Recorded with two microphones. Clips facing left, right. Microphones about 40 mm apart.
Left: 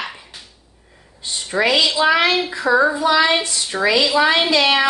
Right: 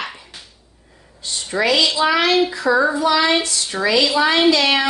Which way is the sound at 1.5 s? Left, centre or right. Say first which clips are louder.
Even; left.